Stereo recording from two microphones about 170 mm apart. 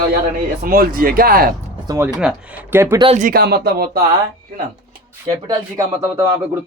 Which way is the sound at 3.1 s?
50° right (ahead or behind).